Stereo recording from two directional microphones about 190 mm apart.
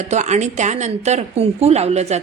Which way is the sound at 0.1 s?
40° right (ahead or behind).